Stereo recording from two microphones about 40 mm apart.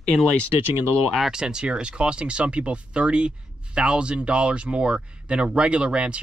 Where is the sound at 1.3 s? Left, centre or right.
Centre.